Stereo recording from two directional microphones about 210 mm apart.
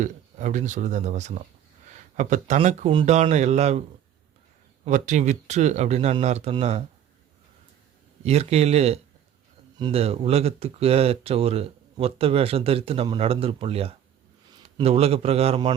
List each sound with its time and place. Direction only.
0.0 s speech: 35° right (ahead or behind)
4.9 s speech: 35° right (ahead or behind)
8.2 s speech: 30° right (ahead or behind)